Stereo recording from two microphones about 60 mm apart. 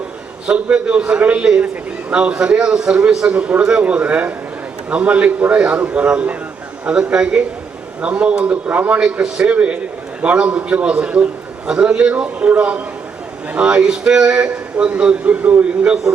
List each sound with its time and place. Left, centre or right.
0.4 s a man's voice: centre
3.6 s a man's voice: centre
9.0 s a man's voice: centre